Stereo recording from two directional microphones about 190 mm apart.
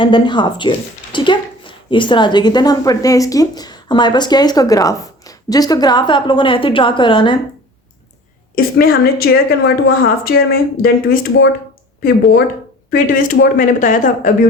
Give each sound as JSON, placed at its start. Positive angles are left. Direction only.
{"t": 0.0, "sound": "a woman's voice", "side_deg": 25}
{"t": 8.5, "sound": "a woman's voice", "side_deg": 50}
{"t": 12.9, "sound": "a woman's voice", "side_deg": 45}